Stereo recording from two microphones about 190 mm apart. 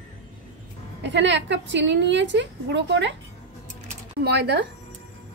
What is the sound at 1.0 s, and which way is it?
A woman's voice, 70° right (ahead or behind).